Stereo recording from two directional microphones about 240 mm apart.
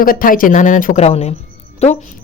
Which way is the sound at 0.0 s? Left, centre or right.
Left.